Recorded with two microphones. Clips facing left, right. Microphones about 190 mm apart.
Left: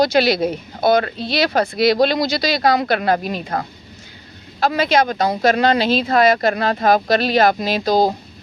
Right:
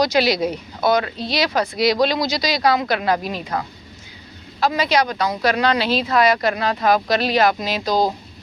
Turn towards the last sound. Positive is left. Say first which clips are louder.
# left 3 dB
turn(degrees=55)  # may be behind; listen again after turning